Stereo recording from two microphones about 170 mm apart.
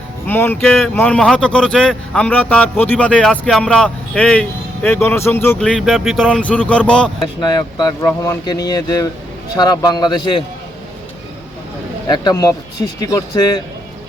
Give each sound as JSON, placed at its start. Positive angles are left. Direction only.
{"t": 0.3, "sound": "a man's voice", "side_deg": 10}
{"t": 7.4, "sound": "speech", "side_deg": 25}
{"t": 12.0, "sound": "speech", "side_deg": 25}